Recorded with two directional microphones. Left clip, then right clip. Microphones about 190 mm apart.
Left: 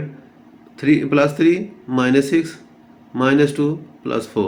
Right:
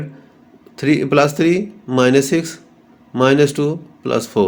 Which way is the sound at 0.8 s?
50° right (ahead or behind).